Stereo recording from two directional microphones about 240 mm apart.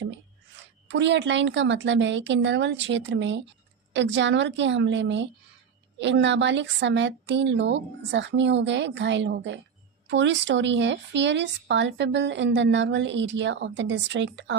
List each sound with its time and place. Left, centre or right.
0.9 s speech: right